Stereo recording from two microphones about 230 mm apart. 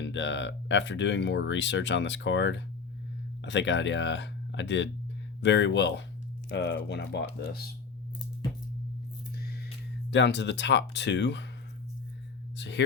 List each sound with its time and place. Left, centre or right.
0.0 s speech: left
9.3 s music: left
10.1 s speech: left
12.5 s speech: left